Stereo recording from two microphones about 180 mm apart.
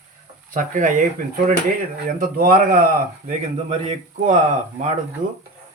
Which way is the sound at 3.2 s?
40° right (ahead or behind).